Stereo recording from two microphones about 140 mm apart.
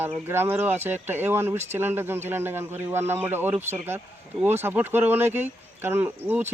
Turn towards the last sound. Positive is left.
turn(degrees=-15)  # may be behind; listen again after turning